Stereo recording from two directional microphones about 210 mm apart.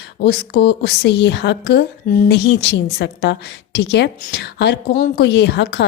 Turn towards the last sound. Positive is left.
turn(degrees=55)  # may be behind; listen again after turning